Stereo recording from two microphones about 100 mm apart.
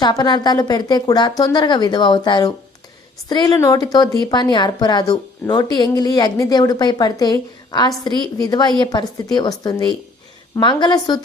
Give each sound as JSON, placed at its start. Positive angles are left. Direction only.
{"t": 0.0, "sound": "speech", "side_deg": 45}